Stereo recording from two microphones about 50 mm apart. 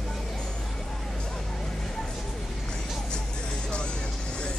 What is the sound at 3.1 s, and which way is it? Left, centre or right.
Vehicle, centre.